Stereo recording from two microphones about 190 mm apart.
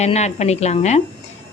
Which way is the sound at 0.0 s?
35° left (ahead or behind).